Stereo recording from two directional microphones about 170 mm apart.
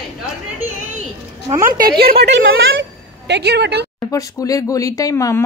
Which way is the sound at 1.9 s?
65° right (ahead or behind).